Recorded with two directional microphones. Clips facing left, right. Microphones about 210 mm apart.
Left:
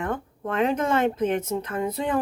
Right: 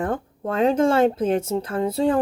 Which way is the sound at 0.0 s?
30° right (ahead or behind).